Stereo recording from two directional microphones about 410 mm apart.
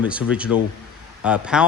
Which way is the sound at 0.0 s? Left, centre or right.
Centre.